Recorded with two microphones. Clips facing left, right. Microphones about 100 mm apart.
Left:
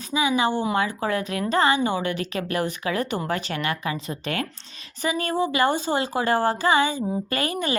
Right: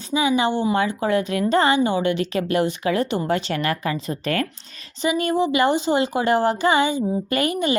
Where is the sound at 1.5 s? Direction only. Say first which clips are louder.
Right 2 dB; 30° right (ahead or behind).